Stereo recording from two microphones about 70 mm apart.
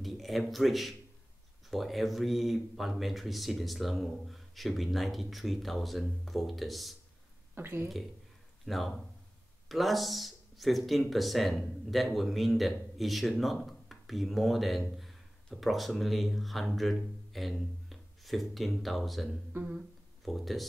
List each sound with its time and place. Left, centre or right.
0.0 s speech: centre
7.5 s speech: right
8.6 s speech: centre
19.5 s humming: centre
20.2 s speech: centre